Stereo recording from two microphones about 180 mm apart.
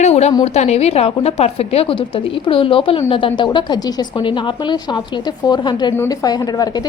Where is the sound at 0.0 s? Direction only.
40° left (ahead or behind).